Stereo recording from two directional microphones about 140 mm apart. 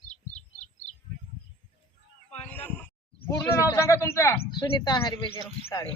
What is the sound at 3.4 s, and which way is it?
Speech, 20° left (ahead or behind).